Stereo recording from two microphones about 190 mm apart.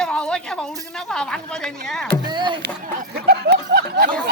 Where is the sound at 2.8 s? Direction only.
50° right (ahead or behind).